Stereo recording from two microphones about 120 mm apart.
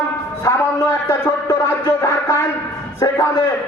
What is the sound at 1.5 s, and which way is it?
Speech, 35° left (ahead or behind).